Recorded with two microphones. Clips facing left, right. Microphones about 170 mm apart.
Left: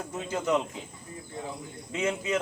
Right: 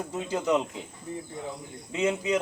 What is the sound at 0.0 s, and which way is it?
Speech, 15° right (ahead or behind).